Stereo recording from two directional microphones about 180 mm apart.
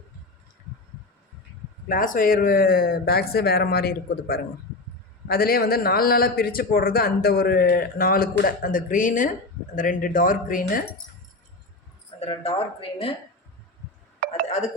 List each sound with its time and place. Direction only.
1.9 s a man's voice: 50° left (ahead or behind)
12.2 s speech: 30° left (ahead or behind)
14.2 s a sound: 55° right (ahead or behind)